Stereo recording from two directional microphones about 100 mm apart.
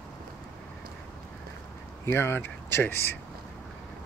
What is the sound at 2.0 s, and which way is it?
Speech, 25° left (ahead or behind).